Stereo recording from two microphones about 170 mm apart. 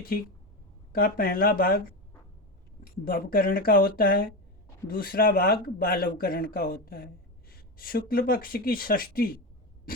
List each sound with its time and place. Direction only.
0.9 s speech: 60° left (ahead or behind)
2.8 s speech: 55° left (ahead or behind)